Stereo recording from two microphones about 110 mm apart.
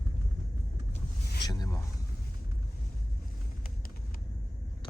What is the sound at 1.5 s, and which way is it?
Speech, 35° left (ahead or behind).